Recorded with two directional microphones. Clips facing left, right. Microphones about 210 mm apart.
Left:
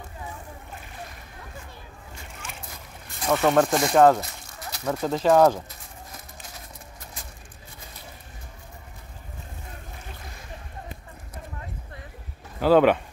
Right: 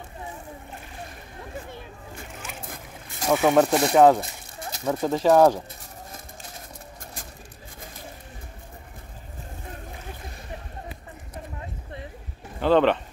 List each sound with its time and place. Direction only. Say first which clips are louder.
2.6 s splash: right 3 dB; 50° right (ahead or behind)
3.3 s speech: right 1 dB; 5° right (ahead or behind)
12.5 s speech: left 2 dB; 5° left (ahead or behind)